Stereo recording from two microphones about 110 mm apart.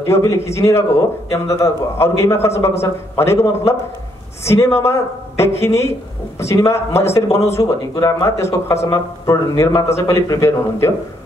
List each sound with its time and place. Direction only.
0.0 s a man's voice: 25° left (ahead or behind)